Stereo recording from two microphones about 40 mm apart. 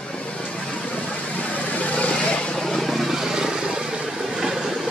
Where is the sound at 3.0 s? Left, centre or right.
Centre.